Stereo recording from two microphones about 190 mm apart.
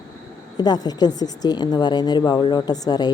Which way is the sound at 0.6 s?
20° left (ahead or behind).